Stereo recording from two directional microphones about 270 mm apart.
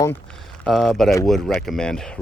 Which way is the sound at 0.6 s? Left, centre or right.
Centre.